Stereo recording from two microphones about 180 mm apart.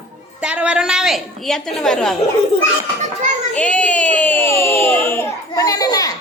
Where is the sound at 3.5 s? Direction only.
5° left (ahead or behind).